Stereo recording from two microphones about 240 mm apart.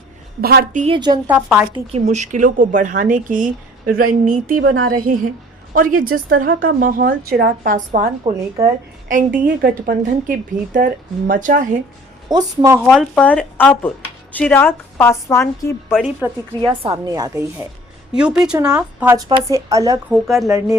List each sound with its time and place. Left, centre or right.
0.4 s speech: right
0.9 s a woman's voice: centre
1.3 s speech: centre
1.7 s speech: right
8.2 s a woman's voice: centre
9.0 s speech: right
12.3 s a woman's voice: centre
12.9 s a woman's voice: centre
16.8 s a woman's voice: centre
18.1 s speech: centre
18.5 s a woman's voice: centre
20.1 s speech: centre